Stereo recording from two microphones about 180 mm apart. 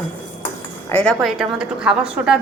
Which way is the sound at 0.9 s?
5° left (ahead or behind).